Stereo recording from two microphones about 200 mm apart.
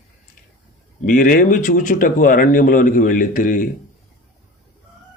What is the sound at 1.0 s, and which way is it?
Speech, 40° left (ahead or behind).